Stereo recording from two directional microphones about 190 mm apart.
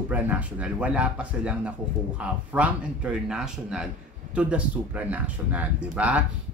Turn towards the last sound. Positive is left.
turn(degrees=-5)  # may be behind; listen again after turning